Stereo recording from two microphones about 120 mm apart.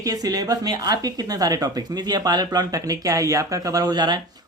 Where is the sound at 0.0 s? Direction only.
30° right (ahead or behind).